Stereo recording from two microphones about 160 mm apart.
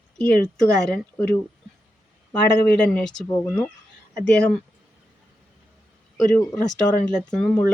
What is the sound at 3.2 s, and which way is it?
Speech, 20° left (ahead or behind).